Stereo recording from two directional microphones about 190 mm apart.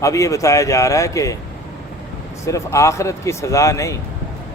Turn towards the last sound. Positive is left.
turn(degrees=15)  # may be behind; listen again after turning